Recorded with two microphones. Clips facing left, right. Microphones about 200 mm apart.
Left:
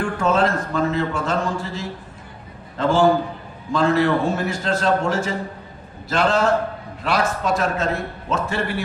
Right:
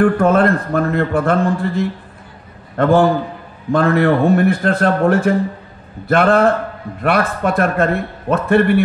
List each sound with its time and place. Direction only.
0.0 s a man's voice: 55° right (ahead or behind)